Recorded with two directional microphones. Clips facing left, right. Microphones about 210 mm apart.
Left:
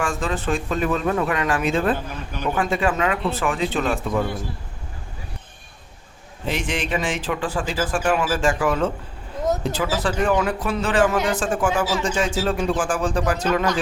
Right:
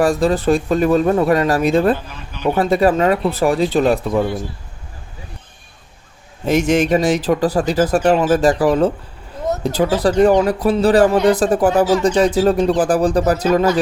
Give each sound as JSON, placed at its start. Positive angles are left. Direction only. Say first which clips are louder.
{"t": 0.0, "sound": "speech", "louder": "right 10 dB", "side_deg": -35}
{"t": 6.4, "sound": "speech", "louder": "right 11 dB", "side_deg": -45}